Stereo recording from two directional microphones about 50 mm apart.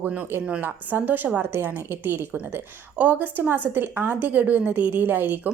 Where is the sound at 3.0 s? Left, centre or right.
Right.